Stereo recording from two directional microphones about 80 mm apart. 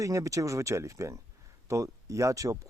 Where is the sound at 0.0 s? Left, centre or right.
Right.